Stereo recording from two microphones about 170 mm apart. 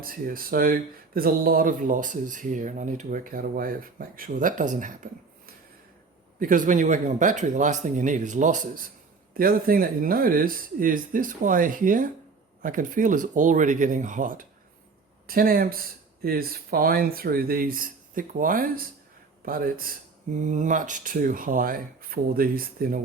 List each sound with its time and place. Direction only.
0.0 s speech: 55° right (ahead or behind)
6.4 s speech: 50° right (ahead or behind)